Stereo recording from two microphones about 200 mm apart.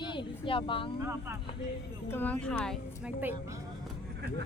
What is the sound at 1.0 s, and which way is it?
Speech, 10° right (ahead or behind).